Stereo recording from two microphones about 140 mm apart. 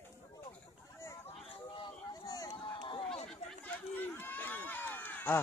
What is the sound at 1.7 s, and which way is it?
Run, 30° left (ahead or behind).